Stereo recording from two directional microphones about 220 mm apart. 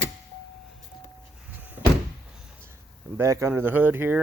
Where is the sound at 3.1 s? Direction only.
15° right (ahead or behind).